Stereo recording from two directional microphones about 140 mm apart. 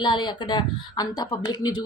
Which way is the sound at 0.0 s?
35° left (ahead or behind).